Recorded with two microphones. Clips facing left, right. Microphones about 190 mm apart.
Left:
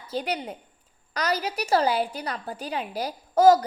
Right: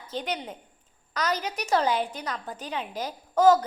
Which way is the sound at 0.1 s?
10° left (ahead or behind).